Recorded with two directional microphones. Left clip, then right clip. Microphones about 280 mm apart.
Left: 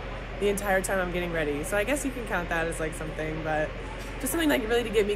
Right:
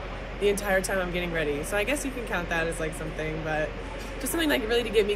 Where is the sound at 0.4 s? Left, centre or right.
Centre.